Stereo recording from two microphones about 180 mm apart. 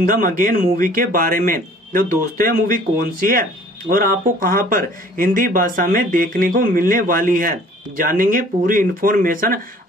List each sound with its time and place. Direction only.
0.0 s speech: 50° right (ahead or behind)